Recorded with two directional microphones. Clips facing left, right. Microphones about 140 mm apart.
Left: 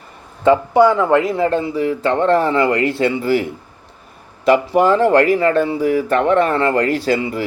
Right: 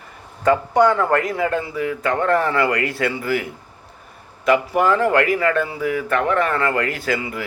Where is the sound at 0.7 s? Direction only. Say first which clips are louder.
Left 2 dB; 10° left (ahead or behind).